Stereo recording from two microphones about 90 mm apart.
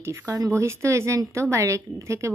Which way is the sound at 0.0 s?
35° right (ahead or behind).